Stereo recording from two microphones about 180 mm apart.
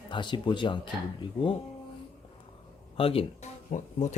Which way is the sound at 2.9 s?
30° left (ahead or behind).